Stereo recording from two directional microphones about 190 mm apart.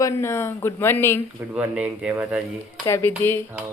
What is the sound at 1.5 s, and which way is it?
Speech, 10° right (ahead or behind).